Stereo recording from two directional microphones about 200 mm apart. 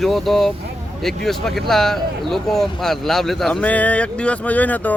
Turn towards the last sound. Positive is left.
turn(degrees=10)  # may be behind; listen again after turning